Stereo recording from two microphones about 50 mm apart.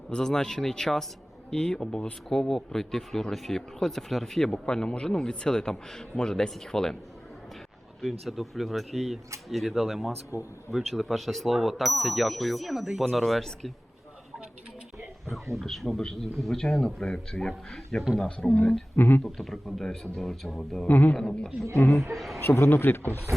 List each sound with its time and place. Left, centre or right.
0.1 s speech: centre
8.0 s speech: centre
10.3 s speech: right
10.7 s speech: centre
15.6 s speech: centre
18.2 s speech: centre
18.9 s speech: left
19.2 s speech: centre
20.8 s speech: left
21.1 s speech: centre
21.8 s speech: left
22.1 s speech: centre
22.4 s a man's voice: left
22.7 s speech: left